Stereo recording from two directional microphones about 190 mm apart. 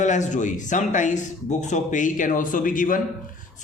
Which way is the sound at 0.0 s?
40° left (ahead or behind).